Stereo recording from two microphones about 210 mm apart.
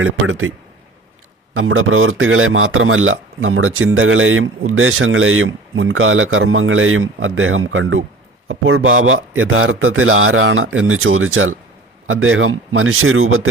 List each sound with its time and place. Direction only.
0.0 s a man's voice: 80° right
1.5 s a man's voice: 80° right